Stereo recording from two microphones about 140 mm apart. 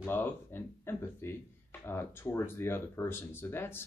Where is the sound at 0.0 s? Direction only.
15° left (ahead or behind).